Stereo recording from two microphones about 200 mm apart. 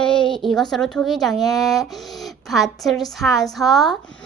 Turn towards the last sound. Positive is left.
turn(degrees=0)  # may be behind; listen again after turning